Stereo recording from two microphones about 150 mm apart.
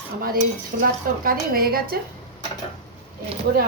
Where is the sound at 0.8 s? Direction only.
70° right (ahead or behind).